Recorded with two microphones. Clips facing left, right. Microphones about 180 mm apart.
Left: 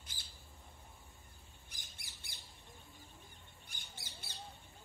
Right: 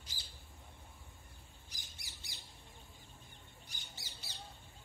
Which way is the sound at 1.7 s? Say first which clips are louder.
Right 1 dB; 55° left (ahead or behind).